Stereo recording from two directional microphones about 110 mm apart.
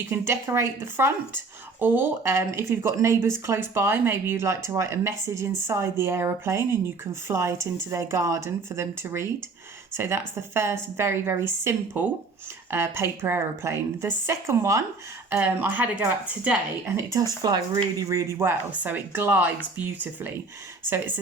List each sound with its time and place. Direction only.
0.1 s speech: 20° right (ahead or behind)
17.5 s speech: 35° right (ahead or behind); by 20.3 s 15° right (ahead or behind)